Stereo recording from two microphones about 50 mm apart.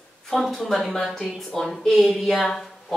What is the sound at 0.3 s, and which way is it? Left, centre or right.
A woman's voice, centre.